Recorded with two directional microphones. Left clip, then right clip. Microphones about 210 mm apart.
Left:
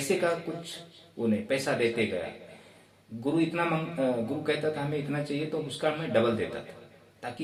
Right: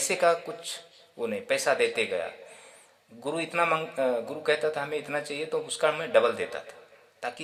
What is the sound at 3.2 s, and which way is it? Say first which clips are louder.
Speech: right 1 dB; 50° right (ahead or behind).